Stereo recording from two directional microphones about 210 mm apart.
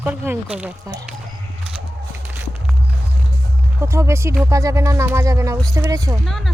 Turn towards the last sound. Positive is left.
turn(degrees=0)  # may be behind; listen again after turning